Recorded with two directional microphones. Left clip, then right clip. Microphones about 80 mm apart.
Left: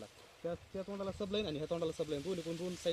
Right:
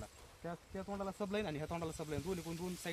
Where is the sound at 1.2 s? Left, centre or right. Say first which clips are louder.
Left 3 dB; right.